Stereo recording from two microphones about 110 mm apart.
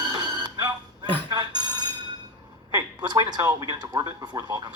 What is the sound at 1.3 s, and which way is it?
Telephone bell ringing, 40° right (ahead or behind).